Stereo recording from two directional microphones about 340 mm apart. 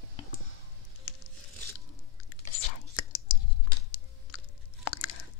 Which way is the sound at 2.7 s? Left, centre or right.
Left.